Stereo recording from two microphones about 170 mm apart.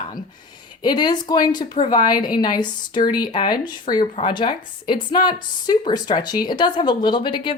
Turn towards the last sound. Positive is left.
turn(degrees=25)  # may be behind; listen again after turning